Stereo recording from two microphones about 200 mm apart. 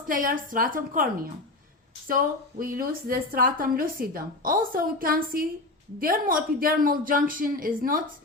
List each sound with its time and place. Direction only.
0.1 s a woman's voice: 45° right (ahead or behind)
2.0 s a woman's voice: 45° right (ahead or behind)